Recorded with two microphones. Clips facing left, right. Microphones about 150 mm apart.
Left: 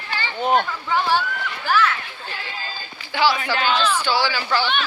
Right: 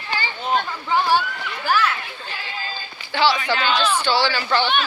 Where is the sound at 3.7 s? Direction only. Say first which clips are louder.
Even; 10° right (ahead or behind).